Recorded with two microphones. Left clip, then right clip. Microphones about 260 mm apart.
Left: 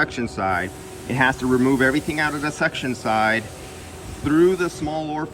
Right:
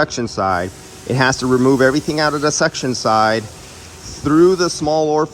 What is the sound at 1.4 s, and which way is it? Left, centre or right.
Speech, left.